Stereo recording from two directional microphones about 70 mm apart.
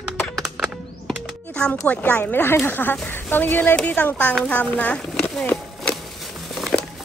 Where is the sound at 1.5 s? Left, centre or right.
Centre.